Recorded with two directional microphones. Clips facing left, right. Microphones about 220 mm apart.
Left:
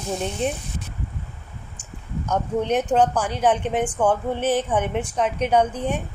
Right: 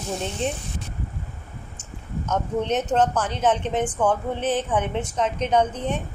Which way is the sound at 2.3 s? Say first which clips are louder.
Left 2 dB; 10° left (ahead or behind).